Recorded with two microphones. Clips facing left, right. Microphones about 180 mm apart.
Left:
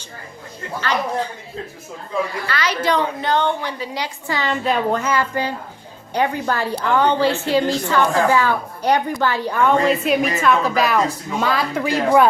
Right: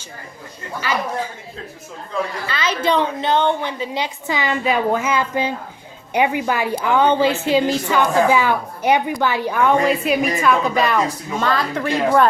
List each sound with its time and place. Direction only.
0.8 s a woman's voice: 10° right (ahead or behind)
2.5 s a woman's voice: 20° right (ahead or behind)
4.6 s a woman's voice: 5° right (ahead or behind)
5.1 s a woman's voice: 20° right (ahead or behind); by 12.3 s 5° left (ahead or behind)